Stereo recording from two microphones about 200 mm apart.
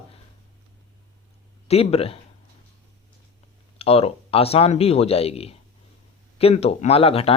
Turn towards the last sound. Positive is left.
turn(degrees=30)  # may be behind; listen again after turning